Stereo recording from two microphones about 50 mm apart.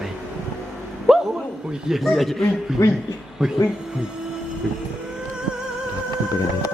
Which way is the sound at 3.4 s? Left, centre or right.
Centre.